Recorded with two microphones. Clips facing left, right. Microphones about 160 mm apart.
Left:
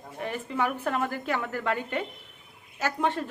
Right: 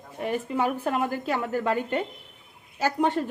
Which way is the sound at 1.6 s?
40° right (ahead or behind).